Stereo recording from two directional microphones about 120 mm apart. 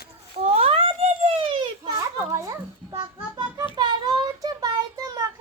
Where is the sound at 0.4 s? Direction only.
55° right (ahead or behind).